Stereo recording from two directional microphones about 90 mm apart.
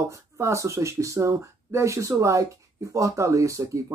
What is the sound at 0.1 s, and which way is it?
Speech, 35° right (ahead or behind).